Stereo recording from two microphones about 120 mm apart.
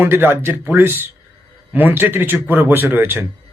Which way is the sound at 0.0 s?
20° right (ahead or behind).